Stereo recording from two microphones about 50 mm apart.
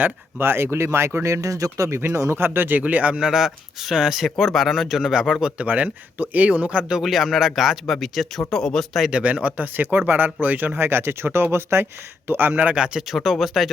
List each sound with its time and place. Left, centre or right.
0.3 s speech: right
2.3 s speech: right
3.2 s speech: centre
4.4 s speech: centre
5.4 s speech: centre
5.6 s speech: right
7.0 s speech: centre
9.1 s speech: right
10.8 s speech: right
12.3 s speech: right
12.7 s speech: centre
13.1 s speech: centre